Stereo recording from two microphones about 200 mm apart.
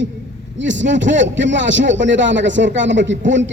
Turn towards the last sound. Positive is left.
turn(degrees=-65)  # may be behind; listen again after turning